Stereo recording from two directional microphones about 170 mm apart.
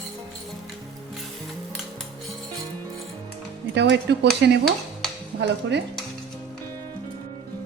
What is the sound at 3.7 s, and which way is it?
Speech, 90° right.